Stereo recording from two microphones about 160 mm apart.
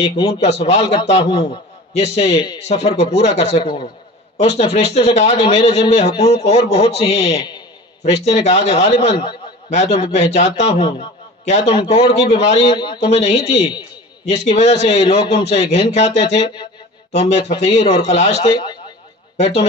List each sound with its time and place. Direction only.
0.0 s a man's voice: 40° left (ahead or behind)
3.6 s a man's voice: 30° left (ahead or behind)
9.7 s a man's voice: 45° left (ahead or behind)
11.4 s a man's voice: 45° left (ahead or behind)
11.7 s a man's voice: 30° left (ahead or behind)
12.2 s a man's voice: 40° left (ahead or behind)
12.7 s speech: 30° left (ahead or behind)
13.1 s a man's voice: 40° left (ahead or behind)